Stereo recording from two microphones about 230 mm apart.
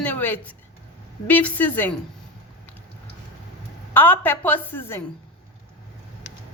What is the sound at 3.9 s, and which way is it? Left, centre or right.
A woman's voice, centre.